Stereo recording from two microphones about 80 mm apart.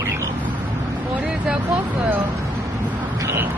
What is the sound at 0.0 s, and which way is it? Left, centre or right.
Bird, right.